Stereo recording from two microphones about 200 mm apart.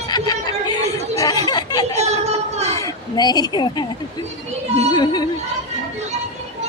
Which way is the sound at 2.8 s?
20° left (ahead or behind).